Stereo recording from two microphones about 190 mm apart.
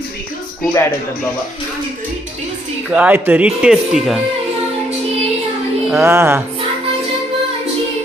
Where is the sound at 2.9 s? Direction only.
10° right (ahead or behind).